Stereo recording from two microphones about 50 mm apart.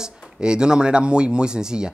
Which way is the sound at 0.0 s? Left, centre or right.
Centre.